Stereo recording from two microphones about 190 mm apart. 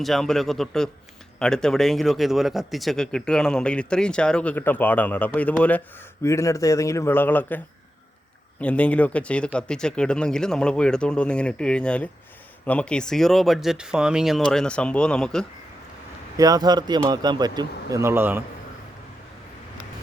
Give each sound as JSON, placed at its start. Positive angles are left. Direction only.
{"t": 0.0, "sound": "a man's voice", "side_deg": 0}
{"t": 8.6, "sound": "a man's voice", "side_deg": 5}
{"t": 16.4, "sound": "speech", "side_deg": -20}